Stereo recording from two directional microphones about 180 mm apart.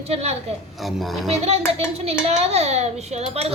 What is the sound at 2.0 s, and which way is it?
Speech, 35° right (ahead or behind).